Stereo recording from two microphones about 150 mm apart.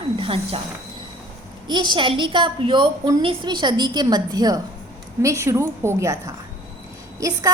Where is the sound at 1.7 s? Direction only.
30° right (ahead or behind).